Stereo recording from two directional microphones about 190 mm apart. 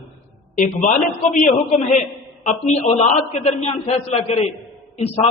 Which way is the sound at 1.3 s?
40° left (ahead or behind).